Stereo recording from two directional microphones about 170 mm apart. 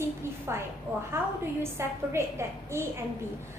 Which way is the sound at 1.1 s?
15° right (ahead or behind).